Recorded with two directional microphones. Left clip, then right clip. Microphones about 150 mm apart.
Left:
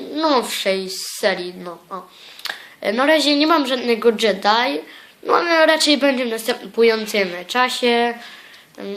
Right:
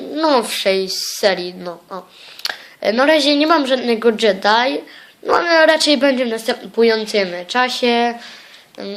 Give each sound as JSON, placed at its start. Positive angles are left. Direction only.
{"t": 0.1, "sound": "a woman's voice", "side_deg": -45}